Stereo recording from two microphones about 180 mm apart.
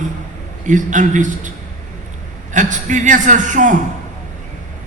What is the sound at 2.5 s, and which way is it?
A man's voice, 45° right (ahead or behind).